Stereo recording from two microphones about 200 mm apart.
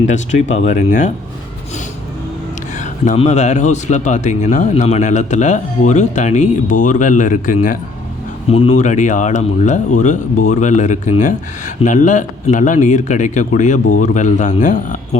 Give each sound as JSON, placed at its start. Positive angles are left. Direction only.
{"t": 0.1, "sound": "speech", "side_deg": 35}
{"t": 3.0, "sound": "speech", "side_deg": 35}
{"t": 8.4, "sound": "speech", "side_deg": 30}